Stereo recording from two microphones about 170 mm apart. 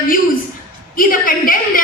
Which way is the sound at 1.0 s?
55° left (ahead or behind).